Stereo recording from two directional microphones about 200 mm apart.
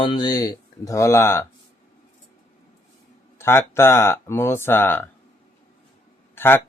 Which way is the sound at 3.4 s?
15° left (ahead or behind).